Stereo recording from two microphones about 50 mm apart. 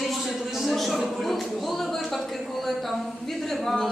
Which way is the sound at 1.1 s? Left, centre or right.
Centre.